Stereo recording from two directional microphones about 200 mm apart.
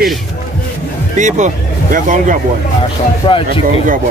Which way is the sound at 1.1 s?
40° right (ahead or behind).